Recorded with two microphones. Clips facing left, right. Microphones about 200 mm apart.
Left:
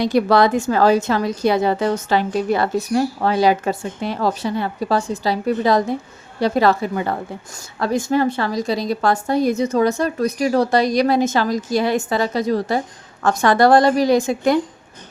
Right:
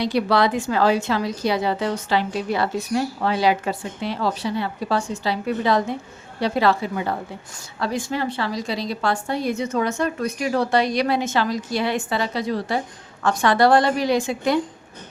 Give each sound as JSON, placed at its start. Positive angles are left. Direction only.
{"t": 0.0, "sound": "a woman's voice", "side_deg": 45}